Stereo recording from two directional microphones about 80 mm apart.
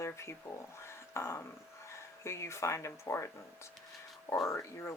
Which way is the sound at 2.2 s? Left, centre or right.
Left.